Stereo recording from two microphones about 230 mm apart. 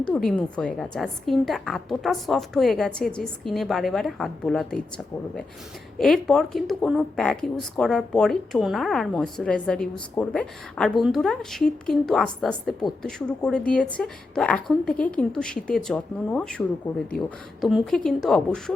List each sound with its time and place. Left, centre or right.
0.0 s speech: centre
6.0 s speech: centre